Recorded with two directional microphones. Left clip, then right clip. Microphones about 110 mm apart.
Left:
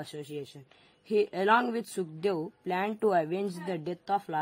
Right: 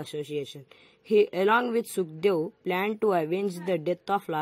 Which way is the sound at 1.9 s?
20° right (ahead or behind).